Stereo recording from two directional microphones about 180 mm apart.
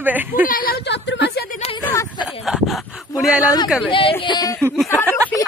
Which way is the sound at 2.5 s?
Centre (ahead or behind).